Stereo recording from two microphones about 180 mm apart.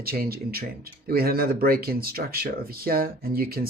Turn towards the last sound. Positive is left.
turn(degrees=-55)  # may be behind; listen again after turning